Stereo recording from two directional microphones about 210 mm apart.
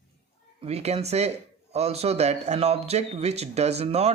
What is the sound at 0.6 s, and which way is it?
Speech, 30° right (ahead or behind).